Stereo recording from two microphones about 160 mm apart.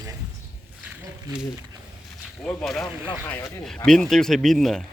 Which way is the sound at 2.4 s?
5° left (ahead or behind).